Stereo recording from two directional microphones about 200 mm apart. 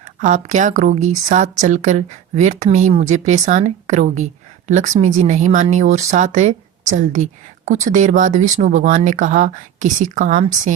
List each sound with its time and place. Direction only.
0.2 s speech: 35° right (ahead or behind)